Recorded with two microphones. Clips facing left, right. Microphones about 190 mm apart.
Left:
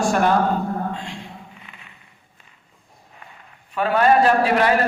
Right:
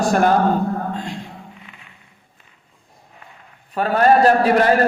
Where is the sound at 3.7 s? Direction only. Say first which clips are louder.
Right 2 dB; 40° right (ahead or behind).